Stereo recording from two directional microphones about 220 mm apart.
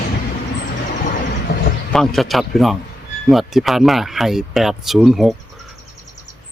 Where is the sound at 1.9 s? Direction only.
Centre (ahead or behind).